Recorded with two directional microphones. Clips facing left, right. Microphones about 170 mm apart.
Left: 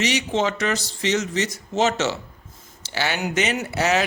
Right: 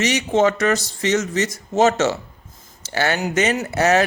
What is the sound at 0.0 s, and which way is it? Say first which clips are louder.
Speech: right 5 dB; 45° right (ahead or behind).